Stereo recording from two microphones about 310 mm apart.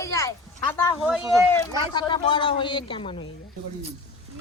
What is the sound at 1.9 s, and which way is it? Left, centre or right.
Speech, centre.